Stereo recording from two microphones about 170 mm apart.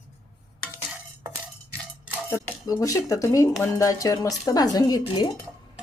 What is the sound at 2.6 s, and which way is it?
A woman's voice, 20° left (ahead or behind).